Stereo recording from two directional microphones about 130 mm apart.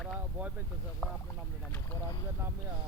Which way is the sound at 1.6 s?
10° left (ahead or behind).